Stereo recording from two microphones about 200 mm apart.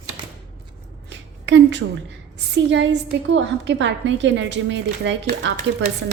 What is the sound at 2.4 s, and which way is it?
A woman's voice, 60° right (ahead or behind).